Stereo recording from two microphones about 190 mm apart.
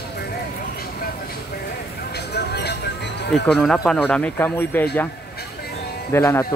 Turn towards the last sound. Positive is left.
turn(degrees=15)  # may be behind; listen again after turning